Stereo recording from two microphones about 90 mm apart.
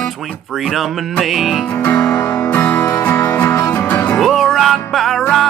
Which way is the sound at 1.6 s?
25° left (ahead or behind).